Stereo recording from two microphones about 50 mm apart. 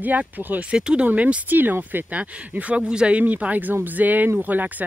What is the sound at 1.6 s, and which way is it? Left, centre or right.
Speech, right.